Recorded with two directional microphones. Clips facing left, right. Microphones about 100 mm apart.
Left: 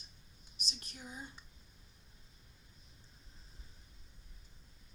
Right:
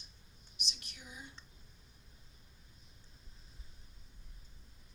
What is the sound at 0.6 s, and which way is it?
Whispering, 40° left (ahead or behind).